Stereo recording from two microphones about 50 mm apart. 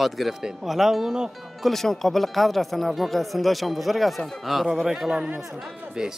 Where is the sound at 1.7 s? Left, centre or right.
Centre.